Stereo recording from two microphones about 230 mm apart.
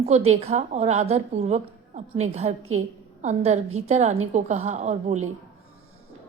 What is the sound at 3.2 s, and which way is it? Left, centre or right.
A woman's voice, right.